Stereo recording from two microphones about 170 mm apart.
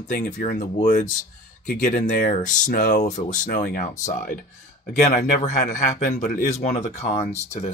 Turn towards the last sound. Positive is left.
turn(degrees=40)  # may be behind; listen again after turning